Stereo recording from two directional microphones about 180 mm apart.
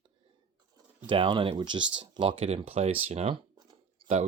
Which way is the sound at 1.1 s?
25° right (ahead or behind).